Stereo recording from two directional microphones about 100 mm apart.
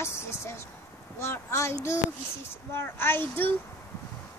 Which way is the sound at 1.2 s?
30° left (ahead or behind).